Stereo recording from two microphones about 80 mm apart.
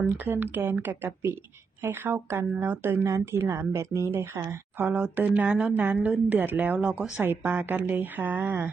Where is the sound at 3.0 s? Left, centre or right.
Right.